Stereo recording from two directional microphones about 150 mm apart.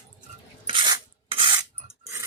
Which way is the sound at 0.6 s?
30° right (ahead or behind).